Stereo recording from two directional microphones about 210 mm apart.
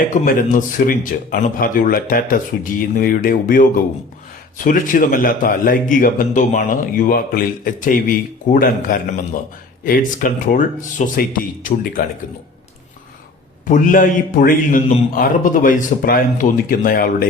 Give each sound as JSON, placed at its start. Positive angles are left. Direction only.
{"t": 0.0, "sound": "speech", "side_deg": 40}
{"t": 13.7, "sound": "speech", "side_deg": 40}